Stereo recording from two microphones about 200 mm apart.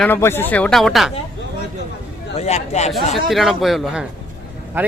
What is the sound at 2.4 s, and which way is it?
Speech, 35° left (ahead or behind).